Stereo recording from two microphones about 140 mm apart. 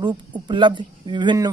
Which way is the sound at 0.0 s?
35° right (ahead or behind).